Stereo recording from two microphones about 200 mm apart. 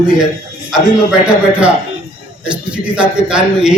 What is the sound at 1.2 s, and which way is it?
A man's voice, 5° right (ahead or behind).